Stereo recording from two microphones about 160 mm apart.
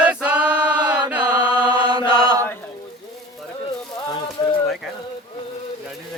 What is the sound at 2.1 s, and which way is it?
Chant, 30° left (ahead or behind).